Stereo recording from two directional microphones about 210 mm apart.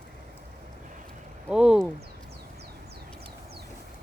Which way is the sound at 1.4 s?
5° right (ahead or behind).